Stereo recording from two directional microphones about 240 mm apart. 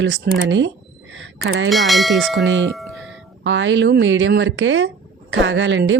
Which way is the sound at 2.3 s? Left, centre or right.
Right.